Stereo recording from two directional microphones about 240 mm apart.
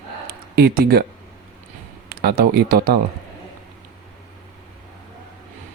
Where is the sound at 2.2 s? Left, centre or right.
Right.